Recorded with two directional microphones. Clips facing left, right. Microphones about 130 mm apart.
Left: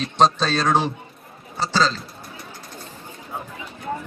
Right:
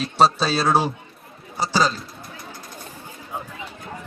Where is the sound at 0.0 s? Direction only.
5° right (ahead or behind).